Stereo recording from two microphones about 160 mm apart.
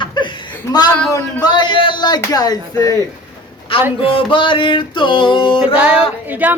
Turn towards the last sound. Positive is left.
turn(degrees=-10)  # may be behind; listen again after turning